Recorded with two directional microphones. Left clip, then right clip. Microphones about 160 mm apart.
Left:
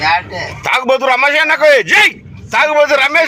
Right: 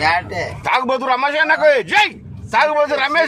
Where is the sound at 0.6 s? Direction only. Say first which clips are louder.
Left 5 dB; 15° left (ahead or behind).